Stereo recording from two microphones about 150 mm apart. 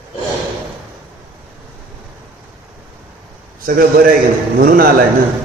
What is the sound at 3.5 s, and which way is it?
A man's voice, 75° right (ahead or behind).